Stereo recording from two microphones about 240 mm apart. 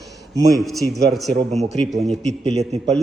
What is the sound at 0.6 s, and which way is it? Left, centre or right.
Speech, centre.